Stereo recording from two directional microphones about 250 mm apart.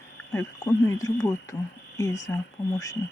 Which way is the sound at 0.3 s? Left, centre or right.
Centre.